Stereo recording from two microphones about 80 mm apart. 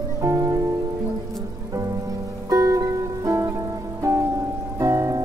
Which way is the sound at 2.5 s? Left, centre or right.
Right.